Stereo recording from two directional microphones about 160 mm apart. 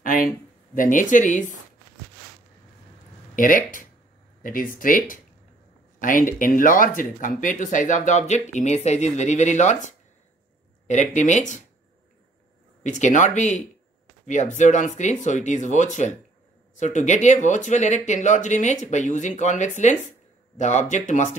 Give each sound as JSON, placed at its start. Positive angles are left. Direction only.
{"t": 0.0, "sound": "a sound", "side_deg": 60}
{"t": 0.7, "sound": "speech", "side_deg": 55}
{"t": 3.3, "sound": "speech", "side_deg": 60}
{"t": 12.8, "sound": "speech", "side_deg": 50}